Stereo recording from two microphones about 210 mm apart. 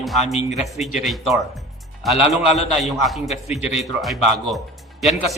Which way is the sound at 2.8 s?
Centre (ahead or behind).